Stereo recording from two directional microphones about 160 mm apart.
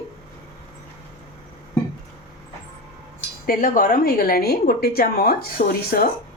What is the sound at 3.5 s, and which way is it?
A woman's voice, 60° left (ahead or behind).